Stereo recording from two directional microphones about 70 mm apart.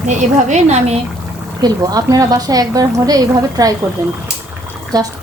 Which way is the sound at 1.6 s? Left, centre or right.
Right.